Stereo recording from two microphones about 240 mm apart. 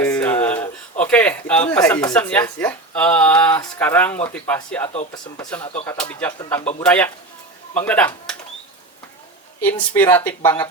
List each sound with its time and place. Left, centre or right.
0.0 s a sound: centre
2.1 s speech: centre
4.9 s speech: left; by 8.4 s centre
9.6 s speech: centre